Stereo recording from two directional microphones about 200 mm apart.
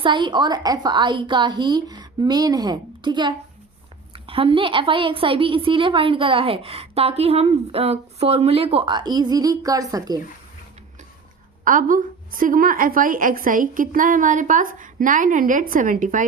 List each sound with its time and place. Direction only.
0.0 s a woman's voice: 25° right (ahead or behind)
11.6 s a woman's voice: 40° right (ahead or behind)